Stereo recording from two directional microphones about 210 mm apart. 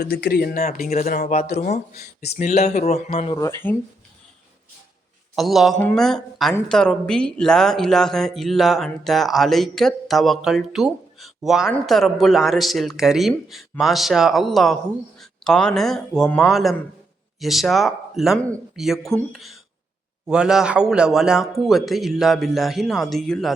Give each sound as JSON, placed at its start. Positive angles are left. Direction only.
{"t": 0.0, "sound": "speech", "side_deg": 50}
{"t": 1.9, "sound": "speech", "side_deg": 50}
{"t": 2.4, "sound": "speech", "side_deg": 35}
{"t": 3.3, "sound": "speech", "side_deg": 15}
{"t": 5.4, "sound": "speech", "side_deg": 0}